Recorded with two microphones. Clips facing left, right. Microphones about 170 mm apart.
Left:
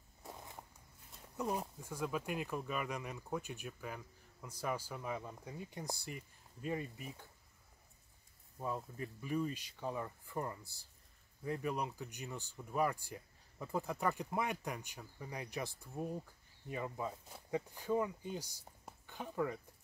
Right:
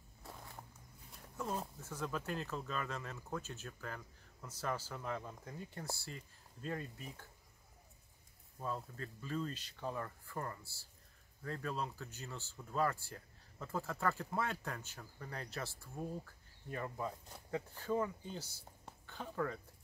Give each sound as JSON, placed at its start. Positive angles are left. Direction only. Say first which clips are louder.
{"t": 0.2, "sound": "walk", "louder": "left 2 dB", "side_deg": 20}
{"t": 1.3, "sound": "speech", "louder": "left 3 dB", "side_deg": 15}
{"t": 8.5, "sound": "speech", "louder": "left 2 dB", "side_deg": 15}